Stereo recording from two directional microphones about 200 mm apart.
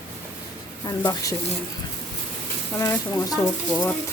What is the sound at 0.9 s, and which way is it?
Speech, 15° left (ahead or behind).